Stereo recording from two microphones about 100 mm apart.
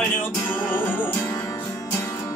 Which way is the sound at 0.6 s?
20° left (ahead or behind).